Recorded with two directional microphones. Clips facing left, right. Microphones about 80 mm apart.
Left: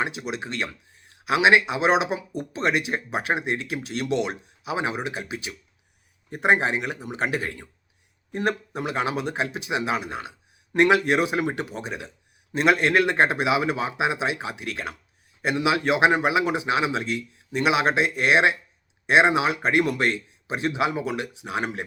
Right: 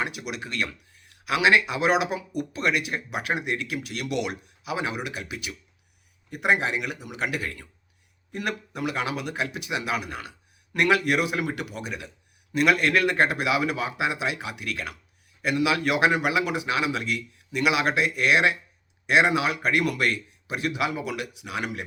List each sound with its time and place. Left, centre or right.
0.0 s a man's voice: left